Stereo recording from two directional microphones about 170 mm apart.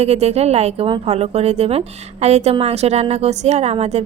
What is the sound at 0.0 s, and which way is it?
A woman's voice, 40° right (ahead or behind).